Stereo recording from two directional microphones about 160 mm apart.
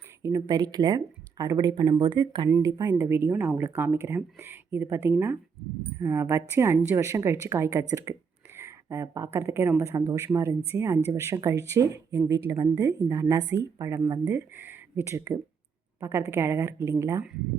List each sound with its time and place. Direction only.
0.2 s speech: 20° right (ahead or behind)